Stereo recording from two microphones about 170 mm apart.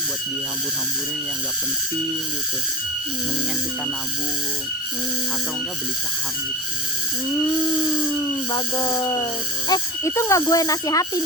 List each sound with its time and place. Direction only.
8.5 s speech: 25° left (ahead or behind)